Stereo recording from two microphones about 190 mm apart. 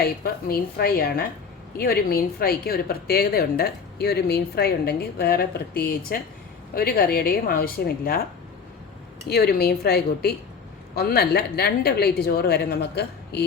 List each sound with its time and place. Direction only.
0.0 s a woman's voice: 55° left (ahead or behind)
9.2 s speech: 55° left (ahead or behind)